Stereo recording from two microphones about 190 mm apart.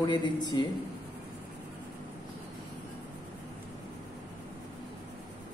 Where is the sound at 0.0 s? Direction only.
25° left (ahead or behind).